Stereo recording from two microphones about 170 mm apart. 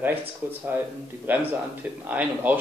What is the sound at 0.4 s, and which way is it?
Speech, 10° right (ahead or behind).